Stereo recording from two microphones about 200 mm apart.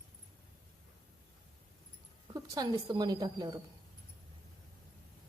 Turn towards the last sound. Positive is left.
turn(degrees=-20)  # may be behind; listen again after turning